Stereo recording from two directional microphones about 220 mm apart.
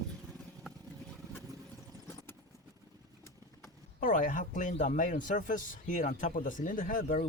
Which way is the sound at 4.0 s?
35° left (ahead or behind).